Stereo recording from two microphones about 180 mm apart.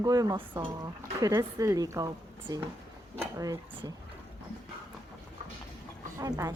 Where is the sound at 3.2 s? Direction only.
20° right (ahead or behind).